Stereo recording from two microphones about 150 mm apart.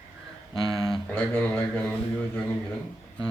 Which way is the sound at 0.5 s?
35° left (ahead or behind).